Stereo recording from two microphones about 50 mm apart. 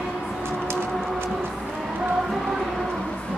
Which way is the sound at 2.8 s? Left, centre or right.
Centre.